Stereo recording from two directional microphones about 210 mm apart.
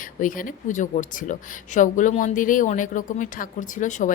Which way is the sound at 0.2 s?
40° left (ahead or behind).